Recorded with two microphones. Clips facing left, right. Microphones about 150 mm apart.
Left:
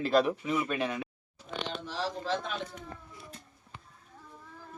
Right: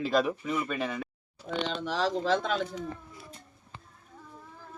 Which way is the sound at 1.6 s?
90° right.